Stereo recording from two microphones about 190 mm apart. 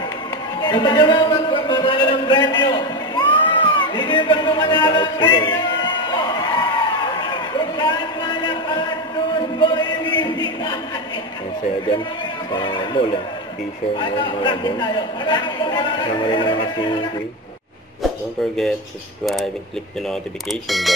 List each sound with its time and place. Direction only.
0.6 s music: 25° left (ahead or behind)
12.5 s a man's voice: 25° left (ahead or behind)
19.2 s speech: centre (ahead or behind)
20.6 s speech: centre (ahead or behind)